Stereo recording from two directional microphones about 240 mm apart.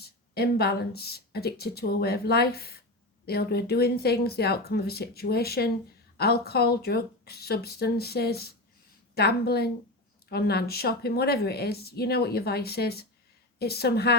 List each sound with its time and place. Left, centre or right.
0.0 s speech: left